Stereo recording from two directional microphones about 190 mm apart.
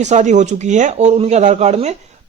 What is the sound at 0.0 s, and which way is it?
A man's voice, 40° right (ahead or behind).